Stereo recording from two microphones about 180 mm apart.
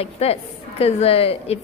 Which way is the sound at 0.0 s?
35° left (ahead or behind).